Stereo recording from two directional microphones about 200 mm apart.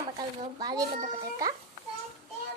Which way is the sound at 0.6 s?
20° right (ahead or behind).